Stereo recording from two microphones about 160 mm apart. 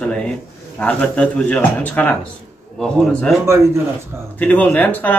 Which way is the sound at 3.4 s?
15° right (ahead or behind).